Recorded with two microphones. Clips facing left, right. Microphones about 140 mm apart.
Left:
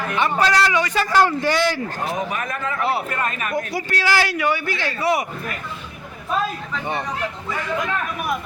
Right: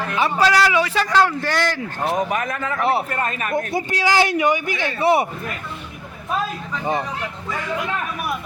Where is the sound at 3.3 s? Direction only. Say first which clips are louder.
Right 2 dB; 35° right (ahead or behind).